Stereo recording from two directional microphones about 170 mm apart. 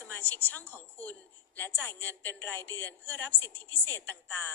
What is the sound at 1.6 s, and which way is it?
A woman's voice, 10° left (ahead or behind).